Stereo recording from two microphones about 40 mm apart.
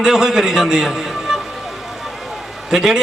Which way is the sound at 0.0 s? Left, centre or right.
Centre.